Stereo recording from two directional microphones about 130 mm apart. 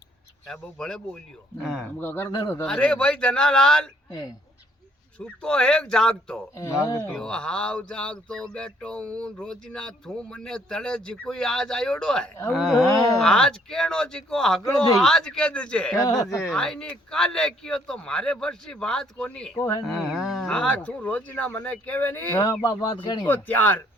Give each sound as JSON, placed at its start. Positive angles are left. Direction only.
{"t": 0.4, "sound": "speech", "side_deg": 5}
{"t": 5.2, "sound": "speech", "side_deg": 5}
{"t": 6.6, "sound": "speech", "side_deg": 25}
{"t": 7.1, "sound": "speech", "side_deg": 5}
{"t": 12.9, "sound": "speech", "side_deg": 25}
{"t": 13.1, "sound": "speech", "side_deg": 5}
{"t": 16.0, "sound": "speech", "side_deg": 30}
{"t": 16.2, "sound": "speech", "side_deg": 5}
{"t": 19.5, "sound": "speech", "side_deg": 20}
{"t": 19.9, "sound": "speech", "side_deg": 0}
{"t": 22.4, "sound": "speech", "side_deg": 30}
{"t": 23.2, "sound": "speech", "side_deg": 15}